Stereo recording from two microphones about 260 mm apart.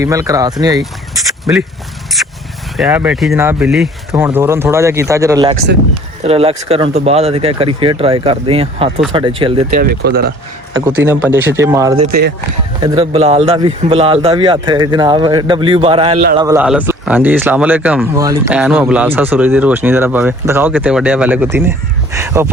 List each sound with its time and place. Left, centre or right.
0.0 s speech: centre
2.1 s a sound: centre
2.7 s a man's voice: centre
9.6 s speech: right
10.8 s a man's voice: centre